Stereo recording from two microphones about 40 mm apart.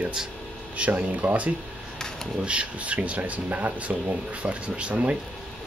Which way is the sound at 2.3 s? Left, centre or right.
Right.